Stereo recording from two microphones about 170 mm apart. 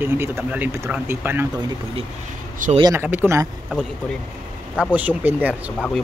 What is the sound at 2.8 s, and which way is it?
Speech, 15° right (ahead or behind).